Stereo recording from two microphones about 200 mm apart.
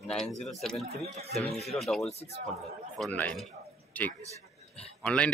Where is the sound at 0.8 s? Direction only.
30° right (ahead or behind).